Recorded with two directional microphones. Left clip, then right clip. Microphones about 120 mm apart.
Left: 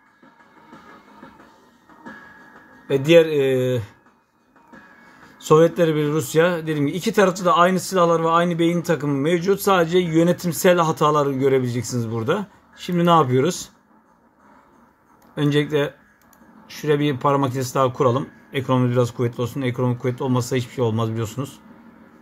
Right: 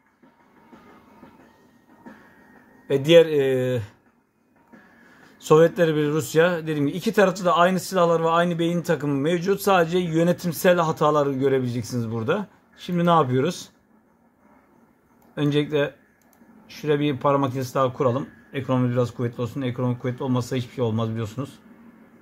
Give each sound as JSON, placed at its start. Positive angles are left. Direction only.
{"t": 2.9, "sound": "speech", "side_deg": -10}
{"t": 5.2, "sound": "speech", "side_deg": -5}
{"t": 15.3, "sound": "speech", "side_deg": 10}